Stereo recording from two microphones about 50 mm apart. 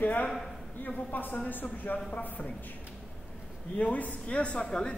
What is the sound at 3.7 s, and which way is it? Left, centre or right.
Speech, left.